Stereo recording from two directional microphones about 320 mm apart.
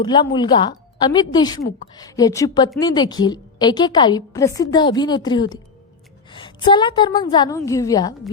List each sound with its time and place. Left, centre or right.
0.0 s a woman's voice: centre